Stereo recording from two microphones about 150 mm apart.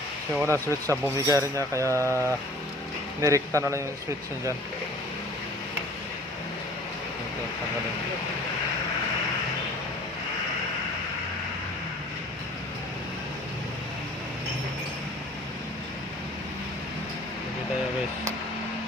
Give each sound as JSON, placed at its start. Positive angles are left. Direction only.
{"t": 0.4, "sound": "speech", "side_deg": 15}
{"t": 1.0, "sound": "speech", "side_deg": -20}